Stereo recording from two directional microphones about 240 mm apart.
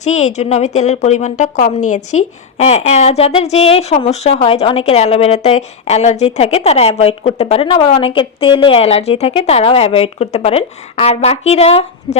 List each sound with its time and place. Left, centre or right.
0.0 s a woman's voice: left